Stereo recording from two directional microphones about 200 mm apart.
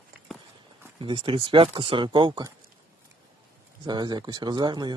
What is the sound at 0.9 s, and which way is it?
Speech, 25° right (ahead or behind).